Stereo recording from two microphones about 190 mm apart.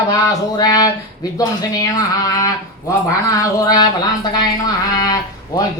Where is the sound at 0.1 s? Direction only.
20° left (ahead or behind).